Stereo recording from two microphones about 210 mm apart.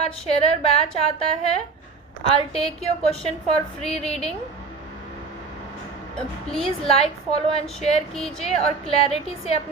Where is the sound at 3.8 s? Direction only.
30° left (ahead or behind).